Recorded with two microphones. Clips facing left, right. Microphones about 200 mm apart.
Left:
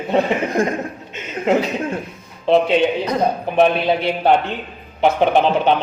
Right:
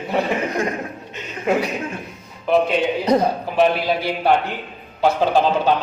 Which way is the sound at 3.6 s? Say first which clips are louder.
Left 2 dB; 25° left (ahead or behind).